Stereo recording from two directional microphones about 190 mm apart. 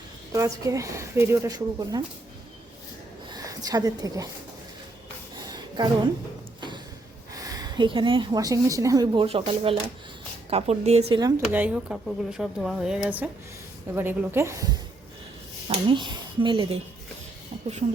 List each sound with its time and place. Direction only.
0.3 s speech: 15° right (ahead or behind)
3.3 s a woman's voice: 20° right (ahead or behind)
5.4 s a sound: 20° right (ahead or behind)
7.3 s a woman's voice: 20° right (ahead or behind)
11.2 s a woman's voice: 20° right (ahead or behind)
11.4 s speech: 5° right (ahead or behind); by 16.7 s 25° right (ahead or behind)